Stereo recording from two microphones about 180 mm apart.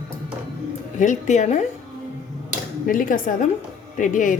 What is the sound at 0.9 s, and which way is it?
Speech, 40° left (ahead or behind).